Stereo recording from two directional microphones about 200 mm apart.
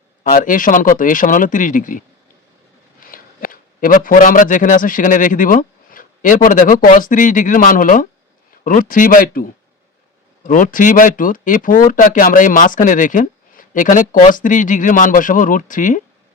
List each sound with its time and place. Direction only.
0.3 s a man's voice: 40° left (ahead or behind)
10.4 s speech: 40° left (ahead or behind)